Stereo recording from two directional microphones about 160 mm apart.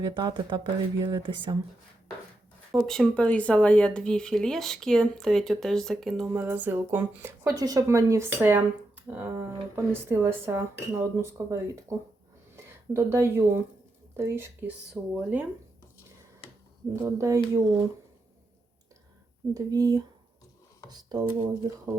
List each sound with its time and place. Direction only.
0.0 s speech: 25° right (ahead or behind)
2.8 s speech: 5° left (ahead or behind)
6.3 s speech: 10° right (ahead or behind)
16.9 s speech: 20° right (ahead or behind)
19.5 s speech: 20° right (ahead or behind)